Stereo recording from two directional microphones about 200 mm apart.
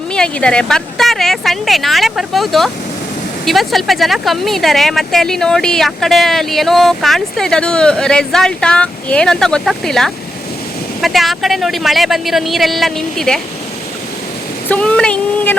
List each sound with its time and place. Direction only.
0.1 s speech: 5° left (ahead or behind)
14.7 s speech: 5° left (ahead or behind)